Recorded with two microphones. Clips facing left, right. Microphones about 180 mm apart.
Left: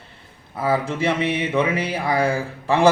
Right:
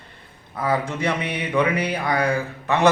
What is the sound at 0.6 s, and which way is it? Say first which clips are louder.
A man's voice: left 2 dB; 30° left (ahead or behind).